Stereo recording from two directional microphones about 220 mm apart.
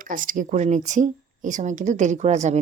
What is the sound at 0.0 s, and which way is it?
Speech, 35° right (ahead or behind).